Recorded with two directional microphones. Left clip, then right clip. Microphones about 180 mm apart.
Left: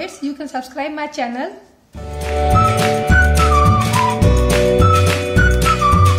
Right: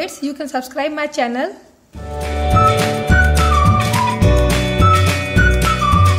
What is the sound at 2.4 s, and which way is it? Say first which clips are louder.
Music: right 1 dB; centre (ahead or behind).